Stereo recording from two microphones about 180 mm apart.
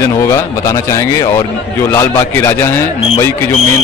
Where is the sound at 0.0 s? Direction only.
15° left (ahead or behind).